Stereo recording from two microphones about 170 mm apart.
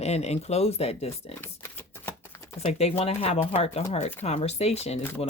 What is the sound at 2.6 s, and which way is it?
Speech, 40° left (ahead or behind).